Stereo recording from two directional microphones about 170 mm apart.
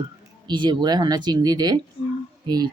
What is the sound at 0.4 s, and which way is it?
Speech, 25° right (ahead or behind).